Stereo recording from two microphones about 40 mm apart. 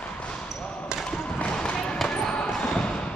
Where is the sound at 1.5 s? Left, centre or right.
Left.